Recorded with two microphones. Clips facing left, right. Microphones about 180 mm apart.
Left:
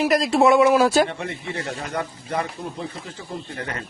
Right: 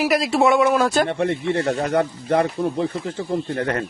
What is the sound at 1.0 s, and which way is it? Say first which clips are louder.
Speech: right 8 dB; 60° right (ahead or behind).